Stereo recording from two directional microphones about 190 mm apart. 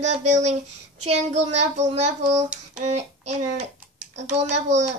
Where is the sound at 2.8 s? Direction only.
35° right (ahead or behind).